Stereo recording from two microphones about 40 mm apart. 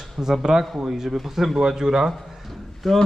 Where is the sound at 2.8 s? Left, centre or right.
Centre.